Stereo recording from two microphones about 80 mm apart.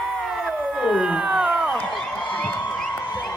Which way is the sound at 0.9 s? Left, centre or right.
Centre.